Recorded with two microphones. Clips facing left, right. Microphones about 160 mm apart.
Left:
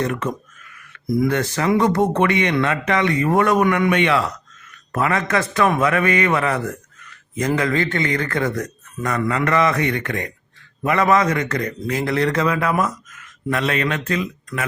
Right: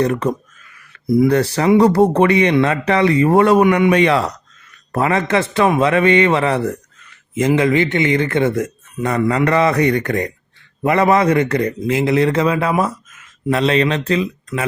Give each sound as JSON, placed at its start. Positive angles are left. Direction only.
{"t": 0.0, "sound": "speech", "side_deg": -35}
{"t": 3.9, "sound": "a man's voice", "side_deg": -35}